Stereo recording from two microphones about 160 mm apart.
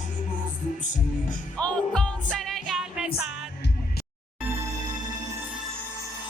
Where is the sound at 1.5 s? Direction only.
5° left (ahead or behind).